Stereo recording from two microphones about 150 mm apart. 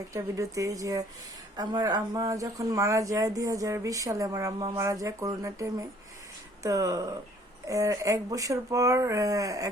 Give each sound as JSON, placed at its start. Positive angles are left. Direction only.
{"t": 0.1, "sound": "speech", "side_deg": -20}